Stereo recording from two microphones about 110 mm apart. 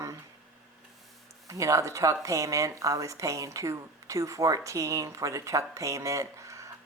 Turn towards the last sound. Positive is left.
turn(degrees=-30)  # may be behind; listen again after turning